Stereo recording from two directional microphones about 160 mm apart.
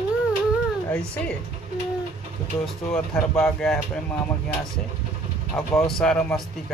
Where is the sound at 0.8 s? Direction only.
10° left (ahead or behind).